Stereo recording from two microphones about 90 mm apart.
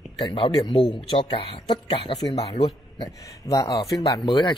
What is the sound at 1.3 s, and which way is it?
Speech, 90° left.